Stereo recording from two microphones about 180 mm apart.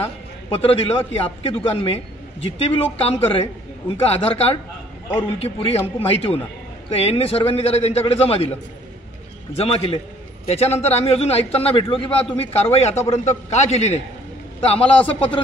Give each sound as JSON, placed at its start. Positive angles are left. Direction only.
{"t": 0.5, "sound": "a man's voice", "side_deg": 30}
{"t": 9.6, "sound": "a man's voice", "side_deg": 35}